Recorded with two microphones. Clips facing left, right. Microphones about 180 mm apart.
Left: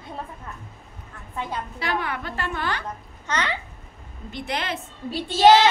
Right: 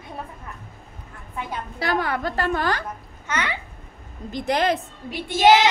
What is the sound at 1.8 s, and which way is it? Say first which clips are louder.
A woman's voice: right 5 dB; 40° right (ahead or behind).